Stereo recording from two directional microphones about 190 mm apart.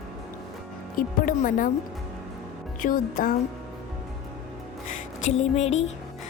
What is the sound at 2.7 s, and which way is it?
Speech, 45° left (ahead or behind).